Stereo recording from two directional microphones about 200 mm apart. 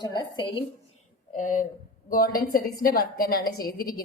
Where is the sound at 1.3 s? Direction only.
40° left (ahead or behind).